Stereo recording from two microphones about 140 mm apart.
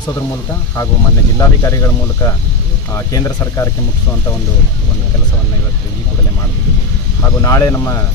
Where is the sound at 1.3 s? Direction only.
25° left (ahead or behind).